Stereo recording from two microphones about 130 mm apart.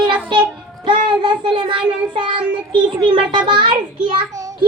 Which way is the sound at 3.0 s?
40° right (ahead or behind).